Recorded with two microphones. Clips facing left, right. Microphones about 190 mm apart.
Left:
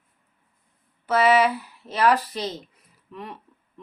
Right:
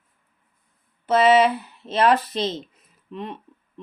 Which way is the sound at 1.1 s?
25° right (ahead or behind).